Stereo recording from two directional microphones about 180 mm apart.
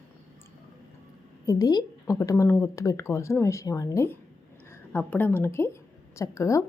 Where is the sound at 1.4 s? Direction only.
20° left (ahead or behind).